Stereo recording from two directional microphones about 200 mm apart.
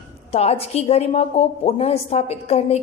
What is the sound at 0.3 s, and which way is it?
A woman's voice, 30° left (ahead or behind).